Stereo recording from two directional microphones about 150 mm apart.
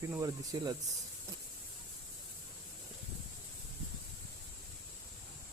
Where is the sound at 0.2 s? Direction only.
25° right (ahead or behind).